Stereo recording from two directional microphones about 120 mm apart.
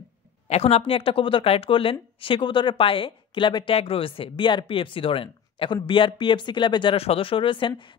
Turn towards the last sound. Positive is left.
turn(degrees=45)  # may be behind; listen again after turning